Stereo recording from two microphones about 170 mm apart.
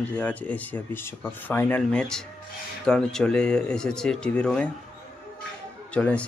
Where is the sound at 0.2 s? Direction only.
10° left (ahead or behind).